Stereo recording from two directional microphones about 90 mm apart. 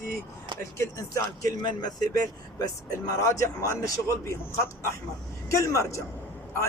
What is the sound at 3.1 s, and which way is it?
A man's voice, 40° left (ahead or behind).